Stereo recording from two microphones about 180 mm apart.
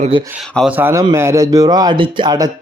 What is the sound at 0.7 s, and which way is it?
Speech, 10° right (ahead or behind).